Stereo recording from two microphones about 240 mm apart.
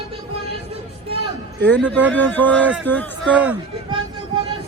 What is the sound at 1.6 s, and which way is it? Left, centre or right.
A man's voice, centre.